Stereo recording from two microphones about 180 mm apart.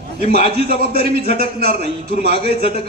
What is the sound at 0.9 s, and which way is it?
Speech, 60° right (ahead or behind).